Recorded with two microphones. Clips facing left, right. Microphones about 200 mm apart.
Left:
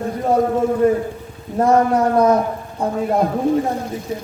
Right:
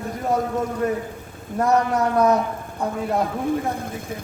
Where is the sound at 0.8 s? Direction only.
30° left (ahead or behind).